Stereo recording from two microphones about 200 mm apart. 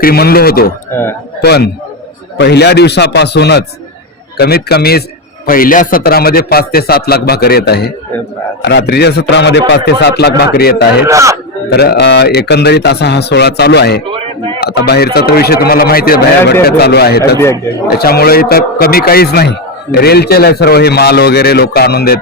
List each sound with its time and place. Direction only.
0.0 s a man's voice: 50° left (ahead or behind)
11.0 s speech: 15° right (ahead or behind)
11.7 s speech: 55° left (ahead or behind)
14.1 s a sound: 25° right (ahead or behind)
14.6 s a man's voice: 55° left (ahead or behind)
17.3 s speech: 15° left (ahead or behind)
17.9 s a man's voice: 50° left (ahead or behind)